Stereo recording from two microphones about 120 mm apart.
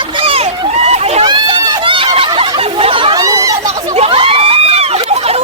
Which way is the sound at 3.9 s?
55° right (ahead or behind).